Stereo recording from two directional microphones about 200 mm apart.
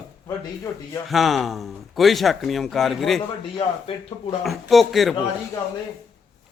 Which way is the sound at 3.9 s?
30° left (ahead or behind).